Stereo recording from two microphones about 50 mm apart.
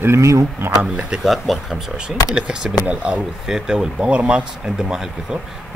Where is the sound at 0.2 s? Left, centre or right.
Right.